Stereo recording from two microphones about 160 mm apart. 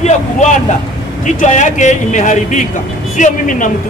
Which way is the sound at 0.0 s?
45° left (ahead or behind).